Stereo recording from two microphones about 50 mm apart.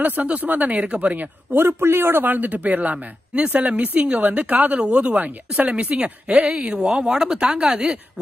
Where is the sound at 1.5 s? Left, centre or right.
Right.